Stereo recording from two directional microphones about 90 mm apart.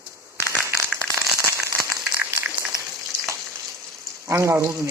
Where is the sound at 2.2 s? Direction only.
20° right (ahead or behind).